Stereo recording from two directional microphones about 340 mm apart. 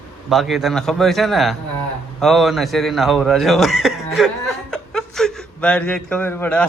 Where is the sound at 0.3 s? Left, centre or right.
Centre.